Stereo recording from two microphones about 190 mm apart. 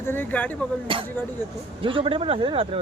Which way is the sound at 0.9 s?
30° right (ahead or behind).